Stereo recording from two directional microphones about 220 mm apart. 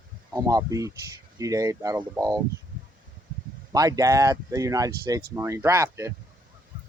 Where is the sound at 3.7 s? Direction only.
15° right (ahead or behind).